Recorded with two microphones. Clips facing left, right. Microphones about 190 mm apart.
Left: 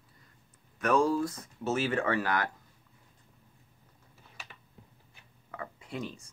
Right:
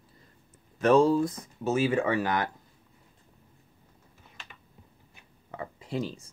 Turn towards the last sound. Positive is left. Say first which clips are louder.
# right 5 dB
turn(degrees=-30)  # may be behind; listen again after turning